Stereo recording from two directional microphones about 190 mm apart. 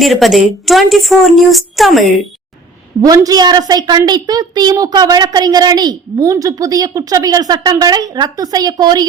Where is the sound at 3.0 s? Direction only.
20° right (ahead or behind).